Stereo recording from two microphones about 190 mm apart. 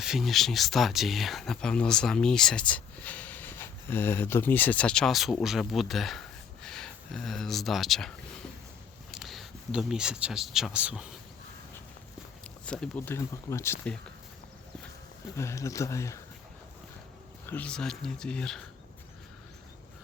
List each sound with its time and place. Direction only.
0.0 s speech: centre (ahead or behind)
9.1 s speech: centre (ahead or behind)
12.6 s speech: 5° left (ahead or behind)
15.4 s speech: 15° left (ahead or behind)
17.5 s speech: 5° left (ahead or behind)